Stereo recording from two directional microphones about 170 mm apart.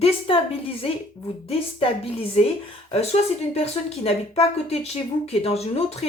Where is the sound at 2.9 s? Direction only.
40° left (ahead or behind).